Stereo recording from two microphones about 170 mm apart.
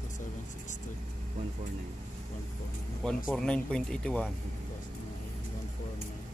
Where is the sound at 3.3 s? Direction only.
5° left (ahead or behind).